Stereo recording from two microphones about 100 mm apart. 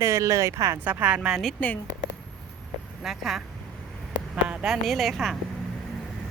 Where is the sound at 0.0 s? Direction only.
30° right (ahead or behind).